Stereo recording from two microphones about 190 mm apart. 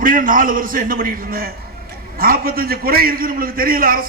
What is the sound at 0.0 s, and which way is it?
A man's voice, 45° right (ahead or behind).